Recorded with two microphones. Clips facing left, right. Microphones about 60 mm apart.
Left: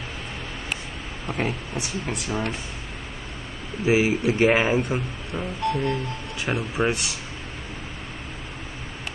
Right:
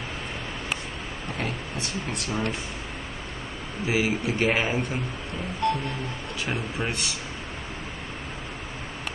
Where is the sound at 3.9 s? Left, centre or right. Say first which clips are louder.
Left 5 dB; left.